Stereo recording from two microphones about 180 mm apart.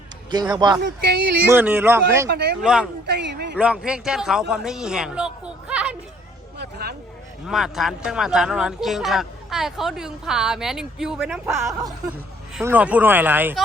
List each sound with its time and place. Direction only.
0.3 s a man's voice: 25° right (ahead or behind)
0.8 s speech: 65° right (ahead or behind)
1.5 s speech: 10° right (ahead or behind)
2.3 s speech: 65° right (ahead or behind)
2.6 s speech: centre (ahead or behind)
3.1 s a man's voice: 75° right (ahead or behind)
3.6 s speech: 5° right (ahead or behind)
6.6 s speech: 60° right (ahead or behind)
7.4 s speech: centre (ahead or behind)